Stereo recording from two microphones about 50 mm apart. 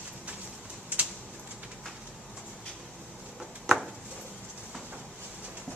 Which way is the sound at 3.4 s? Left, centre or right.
Centre.